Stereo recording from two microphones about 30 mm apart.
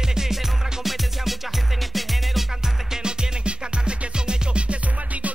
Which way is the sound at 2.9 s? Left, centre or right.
Right.